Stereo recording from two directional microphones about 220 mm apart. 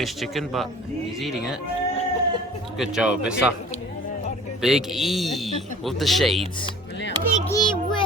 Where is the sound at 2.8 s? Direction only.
5° right (ahead or behind).